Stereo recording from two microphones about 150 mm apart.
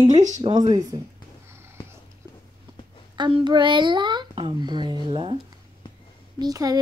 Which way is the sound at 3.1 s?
30° right (ahead or behind).